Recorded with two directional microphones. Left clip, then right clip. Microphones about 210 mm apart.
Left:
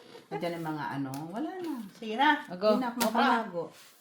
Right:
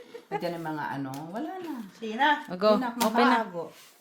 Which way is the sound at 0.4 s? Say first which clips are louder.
Even; 30° right (ahead or behind).